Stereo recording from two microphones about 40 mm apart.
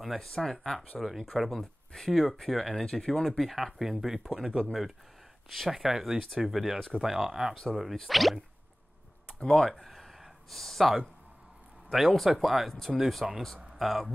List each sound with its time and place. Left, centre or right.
0.0 s speech: centre
0.3 s speech: centre
0.9 s speech: centre
2.7 s speech: centre
3.3 s speech: centre
5.7 s speech: centre
7.7 s speech: centre
9.4 s speech: centre
9.7 s a sound: centre
10.5 s speech: centre